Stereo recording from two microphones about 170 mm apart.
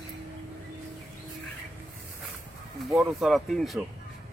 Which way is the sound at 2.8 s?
Centre (ahead or behind).